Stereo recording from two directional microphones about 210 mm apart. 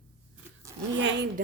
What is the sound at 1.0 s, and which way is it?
Speech, 60° right (ahead or behind).